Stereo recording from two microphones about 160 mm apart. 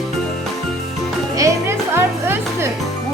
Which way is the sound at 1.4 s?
20° right (ahead or behind).